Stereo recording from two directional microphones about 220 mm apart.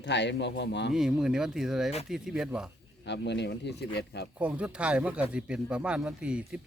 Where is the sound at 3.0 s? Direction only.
50° left (ahead or behind).